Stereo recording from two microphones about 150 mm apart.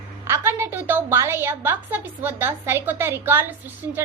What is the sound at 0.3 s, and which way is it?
A woman's voice, 15° right (ahead or behind).